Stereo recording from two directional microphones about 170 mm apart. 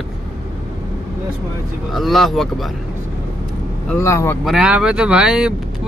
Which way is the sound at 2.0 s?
Centre (ahead or behind).